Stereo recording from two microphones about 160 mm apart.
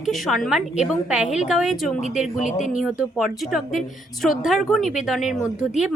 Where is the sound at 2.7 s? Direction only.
5° right (ahead or behind).